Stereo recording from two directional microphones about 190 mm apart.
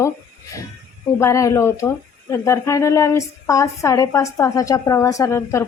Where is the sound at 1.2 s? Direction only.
15° left (ahead or behind).